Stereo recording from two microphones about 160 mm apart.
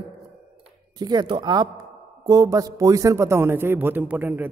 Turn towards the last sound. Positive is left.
turn(degrees=-10)  # may be behind; listen again after turning